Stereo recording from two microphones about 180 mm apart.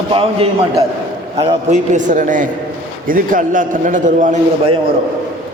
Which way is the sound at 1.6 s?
40° right (ahead or behind).